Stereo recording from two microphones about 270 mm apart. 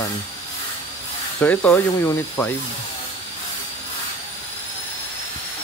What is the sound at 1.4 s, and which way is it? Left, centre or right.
Speech, centre.